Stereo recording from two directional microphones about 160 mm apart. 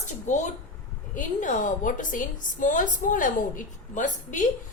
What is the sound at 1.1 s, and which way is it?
A woman's voice, 55° left (ahead or behind).